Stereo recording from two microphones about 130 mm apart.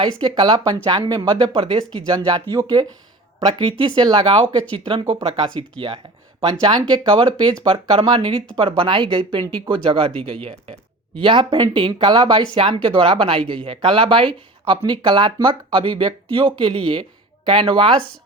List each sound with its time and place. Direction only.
0.2 s speech: 35° right (ahead or behind)
2.0 s speech: 30° right (ahead or behind)
6.5 s speech: 35° right (ahead or behind)